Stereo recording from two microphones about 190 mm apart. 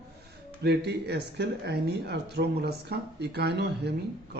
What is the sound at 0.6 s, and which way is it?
Speech, 60° right (ahead or behind).